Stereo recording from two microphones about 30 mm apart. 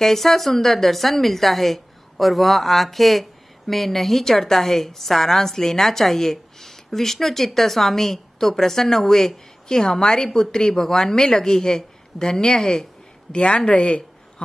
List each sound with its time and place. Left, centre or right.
0.0 s a woman's voice: centre
13.3 s speech: left